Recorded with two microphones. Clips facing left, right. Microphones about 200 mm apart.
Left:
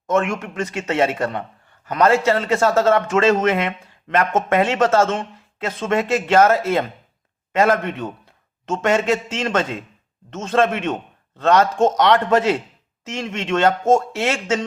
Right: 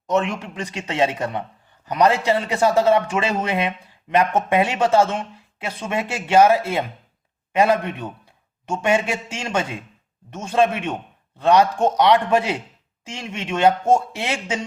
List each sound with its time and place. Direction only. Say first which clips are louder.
0.1 s a man's voice: left 2 dB; 20° right (ahead or behind)